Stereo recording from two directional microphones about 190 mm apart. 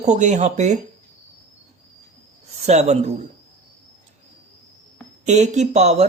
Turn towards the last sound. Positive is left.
turn(degrees=-35)  # may be behind; listen again after turning